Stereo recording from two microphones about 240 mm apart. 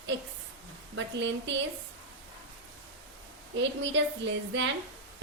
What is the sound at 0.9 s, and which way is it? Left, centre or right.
Speech, right.